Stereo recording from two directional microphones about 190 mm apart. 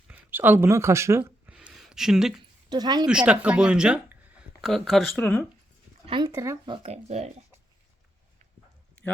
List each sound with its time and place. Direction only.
0.1 s a sound: 10° right (ahead or behind)
2.6 s a woman's voice: 20° right (ahead or behind)
3.1 s speech: 5° right (ahead or behind)
6.1 s speech: 25° right (ahead or behind)
6.8 s speech: 35° right (ahead or behind)